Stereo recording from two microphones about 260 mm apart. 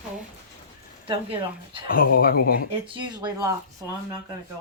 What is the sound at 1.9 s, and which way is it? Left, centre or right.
Speech, left.